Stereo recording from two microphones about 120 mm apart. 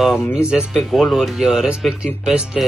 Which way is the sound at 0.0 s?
5° right (ahead or behind).